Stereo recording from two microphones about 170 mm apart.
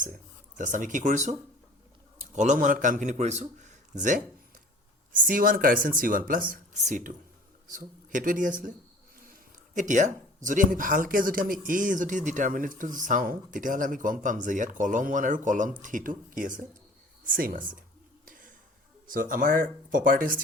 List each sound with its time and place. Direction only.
0.5 s speech: 50° right (ahead or behind)
9.7 s speech: 45° right (ahead or behind)
18.3 s a sound: 55° right (ahead or behind)
19.0 s speech: 50° right (ahead or behind)